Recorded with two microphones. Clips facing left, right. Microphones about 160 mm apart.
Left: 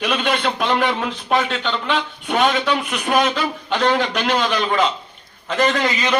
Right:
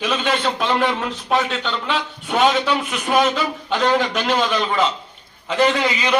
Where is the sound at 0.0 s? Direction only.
10° left (ahead or behind).